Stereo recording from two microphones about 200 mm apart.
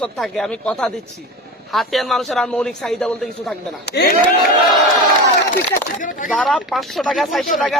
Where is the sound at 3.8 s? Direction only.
55° left (ahead or behind).